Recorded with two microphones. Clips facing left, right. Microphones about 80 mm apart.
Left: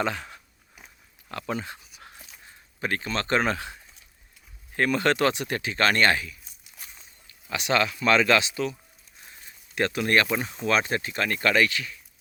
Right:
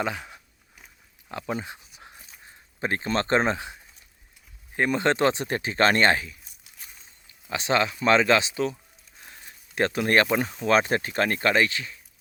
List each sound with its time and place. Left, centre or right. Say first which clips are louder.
0.0 s speech: left 1 dB; centre; by 6.3 s right
7.5 s speech: right 1 dB; right
9.3 s speech: even; right